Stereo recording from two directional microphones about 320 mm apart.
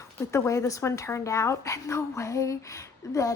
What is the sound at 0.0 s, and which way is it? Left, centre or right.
Speech, centre.